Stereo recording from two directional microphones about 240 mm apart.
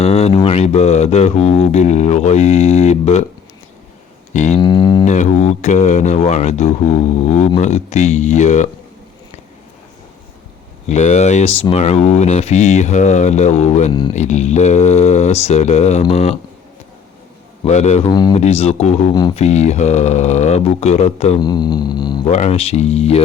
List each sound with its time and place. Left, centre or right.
0.0 s speech: left
4.4 s speech: left
5.0 s speech: left
10.8 s speech: left
17.7 s speech: left
18.1 s speech: centre
22.3 s speech: left